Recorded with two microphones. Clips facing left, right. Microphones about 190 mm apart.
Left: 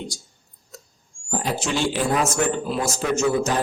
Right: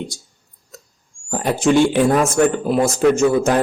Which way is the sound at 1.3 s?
55° right (ahead or behind).